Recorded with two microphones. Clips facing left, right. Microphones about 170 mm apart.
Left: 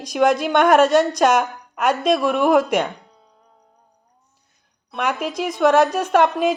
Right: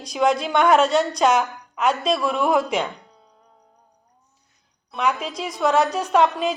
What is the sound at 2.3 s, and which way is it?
Speech, 55° left (ahead or behind).